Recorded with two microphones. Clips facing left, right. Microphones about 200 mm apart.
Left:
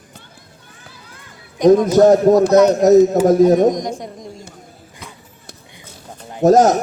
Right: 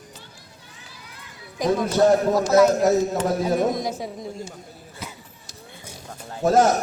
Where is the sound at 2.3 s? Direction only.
40° left (ahead or behind).